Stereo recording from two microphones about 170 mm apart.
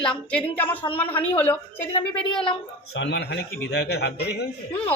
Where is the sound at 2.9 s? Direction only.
90° left; by 4.4 s 75° left (ahead or behind).